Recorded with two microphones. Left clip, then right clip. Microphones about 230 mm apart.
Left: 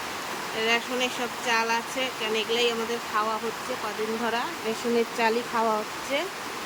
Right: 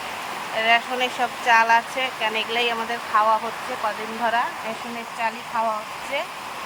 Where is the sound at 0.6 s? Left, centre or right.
Centre.